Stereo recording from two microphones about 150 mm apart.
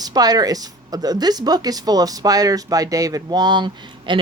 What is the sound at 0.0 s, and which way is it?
Speech, 25° right (ahead or behind).